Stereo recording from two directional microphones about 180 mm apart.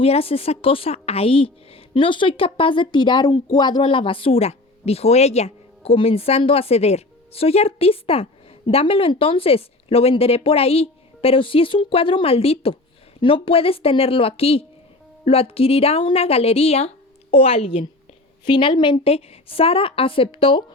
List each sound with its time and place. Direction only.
0.0 s a woman's voice: 30° left (ahead or behind)